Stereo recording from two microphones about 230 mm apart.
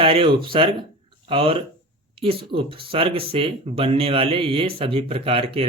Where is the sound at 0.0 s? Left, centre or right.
Right.